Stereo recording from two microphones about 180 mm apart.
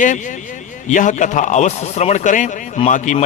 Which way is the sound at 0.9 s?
45° left (ahead or behind).